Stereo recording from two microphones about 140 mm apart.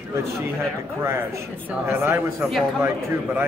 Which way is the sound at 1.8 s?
15° right (ahead or behind).